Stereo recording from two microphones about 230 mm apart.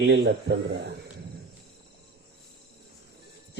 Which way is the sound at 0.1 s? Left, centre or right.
Right.